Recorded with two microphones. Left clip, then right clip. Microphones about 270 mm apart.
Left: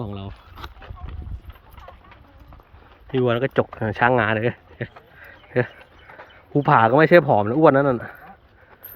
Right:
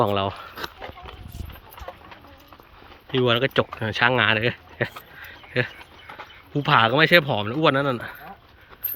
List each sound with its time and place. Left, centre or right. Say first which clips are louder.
0.0 s speech: right 14 dB; centre
3.1 s speech: even; centre
4.9 s a sound: right 4 dB; centre
6.5 s speech: left 3 dB; left